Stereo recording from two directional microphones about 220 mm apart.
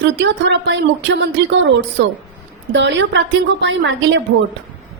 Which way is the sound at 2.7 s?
55° right (ahead or behind).